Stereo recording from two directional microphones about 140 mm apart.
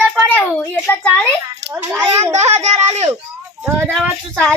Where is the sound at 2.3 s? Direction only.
55° right (ahead or behind).